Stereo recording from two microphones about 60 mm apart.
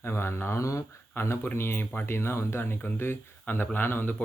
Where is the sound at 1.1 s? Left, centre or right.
Left.